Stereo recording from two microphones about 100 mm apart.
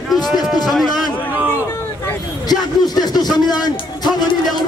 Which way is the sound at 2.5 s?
45° left (ahead or behind).